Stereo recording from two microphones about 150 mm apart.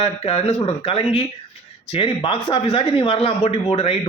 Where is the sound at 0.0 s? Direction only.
40° left (ahead or behind).